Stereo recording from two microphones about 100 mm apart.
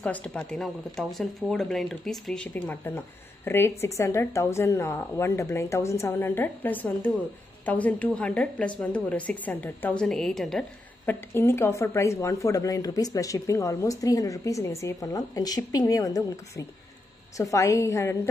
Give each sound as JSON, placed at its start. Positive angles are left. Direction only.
{"t": 0.0, "sound": "speech", "side_deg": 10}
{"t": 10.0, "sound": "a woman's voice", "side_deg": 5}
{"t": 11.1, "sound": "speech", "side_deg": 25}